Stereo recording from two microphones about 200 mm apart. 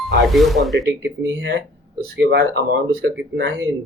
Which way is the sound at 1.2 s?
60° right (ahead or behind).